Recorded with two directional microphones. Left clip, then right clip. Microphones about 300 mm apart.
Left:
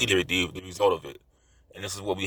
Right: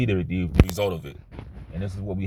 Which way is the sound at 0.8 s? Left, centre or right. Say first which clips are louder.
Left 3 dB; centre.